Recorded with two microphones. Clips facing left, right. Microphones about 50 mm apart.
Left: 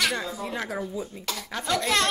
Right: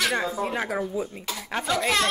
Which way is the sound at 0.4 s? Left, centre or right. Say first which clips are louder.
Right 4 dB; right.